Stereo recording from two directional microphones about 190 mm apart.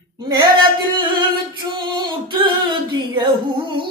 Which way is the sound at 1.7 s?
25° right (ahead or behind).